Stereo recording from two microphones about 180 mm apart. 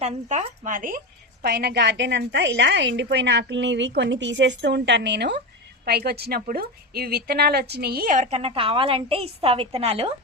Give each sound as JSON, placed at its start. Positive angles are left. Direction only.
{"t": 0.0, "sound": "a woman's voice", "side_deg": -40}